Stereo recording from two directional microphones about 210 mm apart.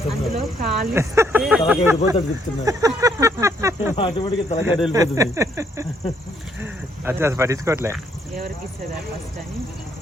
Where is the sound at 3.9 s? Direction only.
25° left (ahead or behind).